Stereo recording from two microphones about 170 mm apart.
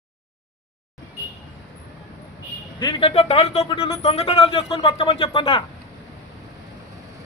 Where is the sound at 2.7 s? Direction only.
25° left (ahead or behind).